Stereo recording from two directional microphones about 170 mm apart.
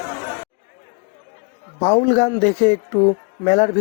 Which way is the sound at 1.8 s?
40° left (ahead or behind).